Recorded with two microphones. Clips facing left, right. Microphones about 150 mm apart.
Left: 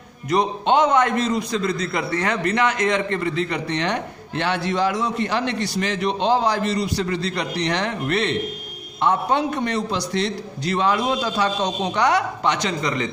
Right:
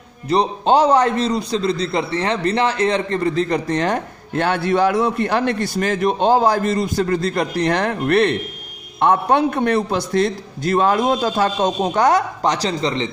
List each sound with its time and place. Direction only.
0.3 s a man's voice: 35° right (ahead or behind)